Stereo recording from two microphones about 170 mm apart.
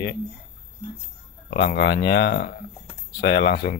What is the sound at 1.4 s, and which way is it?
Speech, 70° left (ahead or behind).